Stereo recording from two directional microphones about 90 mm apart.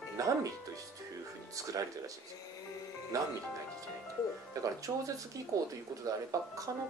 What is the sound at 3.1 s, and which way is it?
Speech, 40° right (ahead or behind).